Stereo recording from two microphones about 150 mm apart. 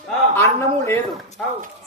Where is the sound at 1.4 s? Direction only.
5° left (ahead or behind).